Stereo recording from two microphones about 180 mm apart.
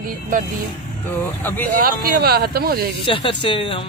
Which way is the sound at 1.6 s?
50° right (ahead or behind).